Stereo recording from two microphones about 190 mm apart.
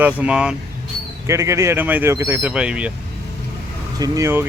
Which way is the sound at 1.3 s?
15° right (ahead or behind).